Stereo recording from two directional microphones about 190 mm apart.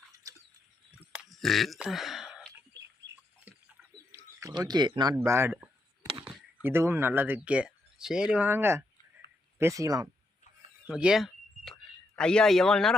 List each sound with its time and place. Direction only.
1.1 s sigh: centre (ahead or behind)
4.1 s bird: 15° right (ahead or behind)
5.1 s speech: 15° right (ahead or behind)
10.8 s a sound: 5° right (ahead or behind)